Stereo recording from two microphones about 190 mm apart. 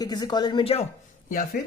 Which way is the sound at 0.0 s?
20° left (ahead or behind).